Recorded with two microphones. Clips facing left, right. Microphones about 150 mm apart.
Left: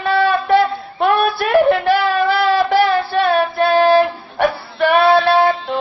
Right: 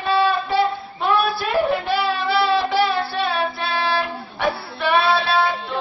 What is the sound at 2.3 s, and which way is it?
Child singing, 50° left (ahead or behind).